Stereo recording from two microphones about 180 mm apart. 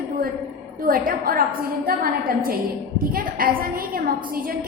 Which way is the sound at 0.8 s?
55° right (ahead or behind).